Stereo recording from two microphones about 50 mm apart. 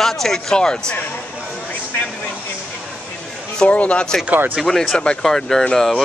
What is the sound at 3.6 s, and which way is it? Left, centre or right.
Speech, left.